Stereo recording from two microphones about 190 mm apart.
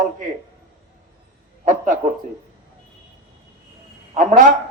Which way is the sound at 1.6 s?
45° right (ahead or behind).